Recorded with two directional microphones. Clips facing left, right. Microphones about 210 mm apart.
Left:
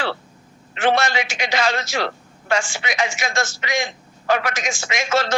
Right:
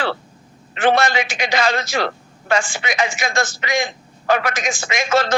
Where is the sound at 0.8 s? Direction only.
55° right (ahead or behind).